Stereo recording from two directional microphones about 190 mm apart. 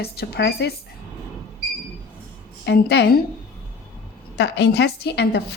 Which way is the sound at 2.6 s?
60° left (ahead or behind).